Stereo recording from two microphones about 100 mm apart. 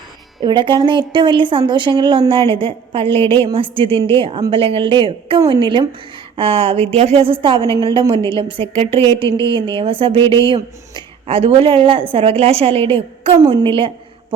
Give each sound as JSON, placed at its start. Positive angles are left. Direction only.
{"t": 0.4, "sound": "speech", "side_deg": -50}
{"t": 2.5, "sound": "a woman's voice", "side_deg": -65}
{"t": 6.3, "sound": "a woman's voice", "side_deg": -65}
{"t": 10.3, "sound": "a woman's voice", "side_deg": -55}
{"t": 13.3, "sound": "speech", "side_deg": -45}
{"t": 13.7, "sound": "a woman's voice", "side_deg": -60}